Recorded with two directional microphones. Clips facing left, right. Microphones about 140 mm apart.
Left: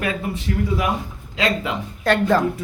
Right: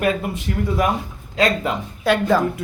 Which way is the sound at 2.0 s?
10° right (ahead or behind).